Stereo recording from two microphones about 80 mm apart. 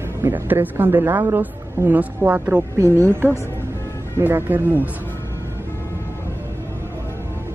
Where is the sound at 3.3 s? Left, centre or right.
Left.